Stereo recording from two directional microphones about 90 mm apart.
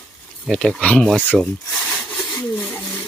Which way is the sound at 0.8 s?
15° left (ahead or behind).